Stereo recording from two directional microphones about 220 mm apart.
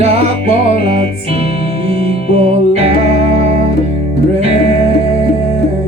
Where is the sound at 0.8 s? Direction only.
25° right (ahead or behind).